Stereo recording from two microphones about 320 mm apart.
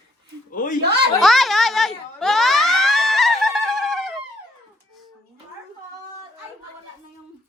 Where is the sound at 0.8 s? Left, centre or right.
Right.